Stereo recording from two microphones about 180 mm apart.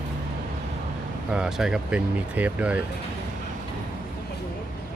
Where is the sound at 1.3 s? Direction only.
5° right (ahead or behind).